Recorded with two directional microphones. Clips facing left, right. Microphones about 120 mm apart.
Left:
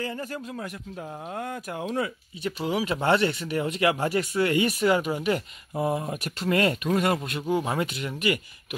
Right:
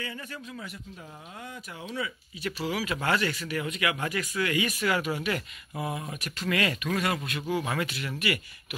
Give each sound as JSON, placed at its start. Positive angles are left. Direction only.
{"t": 0.0, "sound": "speech", "side_deg": 40}
{"t": 1.3, "sound": "speech", "side_deg": 60}
{"t": 2.4, "sound": "speech", "side_deg": 25}
{"t": 4.7, "sound": "speech", "side_deg": 25}
{"t": 5.9, "sound": "speech", "side_deg": 40}